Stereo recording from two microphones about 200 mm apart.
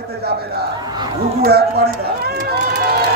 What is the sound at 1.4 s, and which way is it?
Speech, 50° right (ahead or behind).